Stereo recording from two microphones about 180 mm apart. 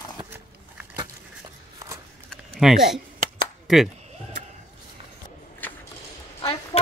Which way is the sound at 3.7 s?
Centre (ahead or behind).